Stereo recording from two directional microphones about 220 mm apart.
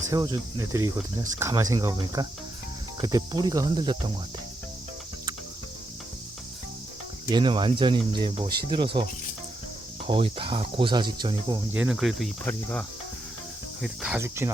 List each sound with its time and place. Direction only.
0.1 s speech: 15° right (ahead or behind)
7.3 s speech: 20° right (ahead or behind)
10.1 s speech: 20° right (ahead or behind)
11.7 s cricket: 5° right (ahead or behind)
13.8 s speech: 5° right (ahead or behind)